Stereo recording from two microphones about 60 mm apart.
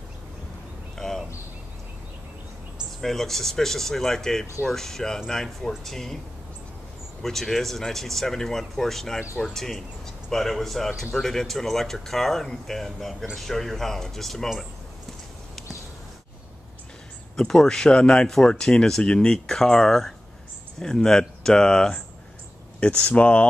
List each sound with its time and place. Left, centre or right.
0.9 s a sound: centre
3.0 s speech: centre
7.2 s speech: centre
17.4 s speech: centre
22.8 s speech: left